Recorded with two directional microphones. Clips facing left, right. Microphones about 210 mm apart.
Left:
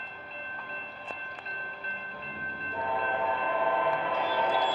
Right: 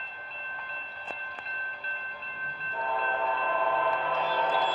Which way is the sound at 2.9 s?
15° left (ahead or behind).